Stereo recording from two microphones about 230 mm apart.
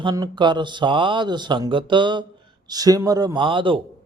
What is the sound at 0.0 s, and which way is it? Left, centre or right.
A man's voice, centre.